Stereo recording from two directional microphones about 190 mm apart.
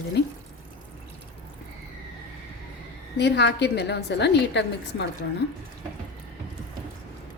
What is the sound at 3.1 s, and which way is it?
A woman's voice, 65° left (ahead or behind).